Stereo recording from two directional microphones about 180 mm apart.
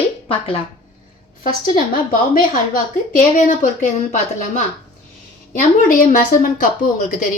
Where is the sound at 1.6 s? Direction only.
55° left (ahead or behind).